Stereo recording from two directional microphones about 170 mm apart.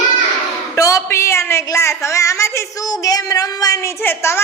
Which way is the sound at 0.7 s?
20° left (ahead or behind).